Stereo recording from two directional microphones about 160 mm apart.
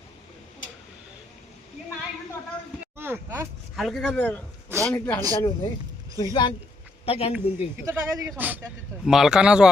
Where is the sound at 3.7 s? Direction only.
Centre (ahead or behind).